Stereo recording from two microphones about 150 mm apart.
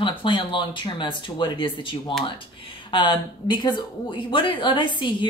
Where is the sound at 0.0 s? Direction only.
35° left (ahead or behind).